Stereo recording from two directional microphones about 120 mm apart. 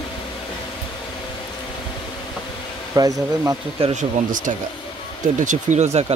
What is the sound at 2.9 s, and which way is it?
Speech, 30° right (ahead or behind).